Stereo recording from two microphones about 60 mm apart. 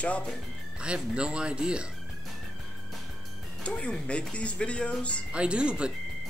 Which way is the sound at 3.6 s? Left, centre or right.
Centre.